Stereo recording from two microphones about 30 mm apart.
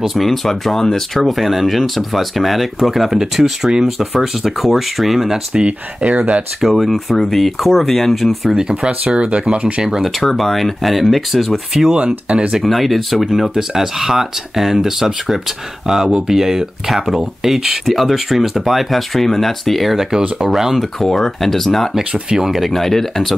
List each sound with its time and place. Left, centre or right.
0.2 s speech: centre
1.3 s speech: centre
5.5 s speech: right
6.7 s speech: centre
8.5 s speech: right
9.8 s speech: centre
10.2 s speech: centre
20.1 s speech: centre
20.7 s speech: centre
22.4 s speech: centre
22.7 s speech: centre